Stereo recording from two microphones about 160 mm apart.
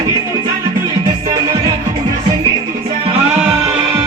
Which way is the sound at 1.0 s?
25° right (ahead or behind).